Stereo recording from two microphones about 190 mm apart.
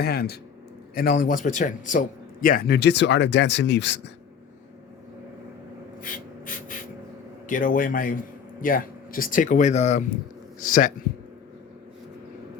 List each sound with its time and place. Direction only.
0.0 s a man's voice: 55° left (ahead or behind)
6.0 s gasp: 45° left (ahead or behind)
7.4 s speech: 45° left (ahead or behind)